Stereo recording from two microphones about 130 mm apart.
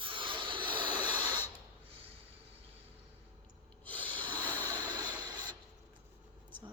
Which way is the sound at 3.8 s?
10° left (ahead or behind).